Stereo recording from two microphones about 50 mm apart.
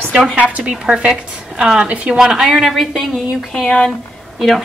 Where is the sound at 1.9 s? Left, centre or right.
Right.